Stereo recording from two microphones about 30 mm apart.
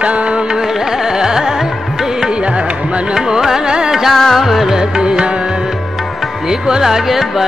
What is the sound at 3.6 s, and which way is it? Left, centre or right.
Music, right.